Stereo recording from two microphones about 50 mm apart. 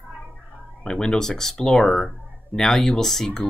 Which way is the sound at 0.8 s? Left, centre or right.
Centre.